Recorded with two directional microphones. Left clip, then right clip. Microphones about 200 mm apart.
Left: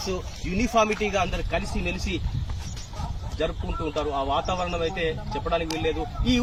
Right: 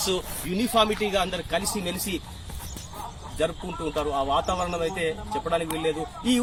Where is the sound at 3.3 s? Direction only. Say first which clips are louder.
Right 1 dB; centre (ahead or behind).